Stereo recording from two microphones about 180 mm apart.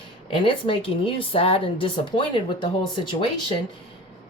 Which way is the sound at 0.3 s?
30° left (ahead or behind).